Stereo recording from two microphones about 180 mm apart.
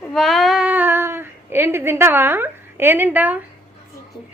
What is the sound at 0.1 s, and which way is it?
Child singing, centre (ahead or behind).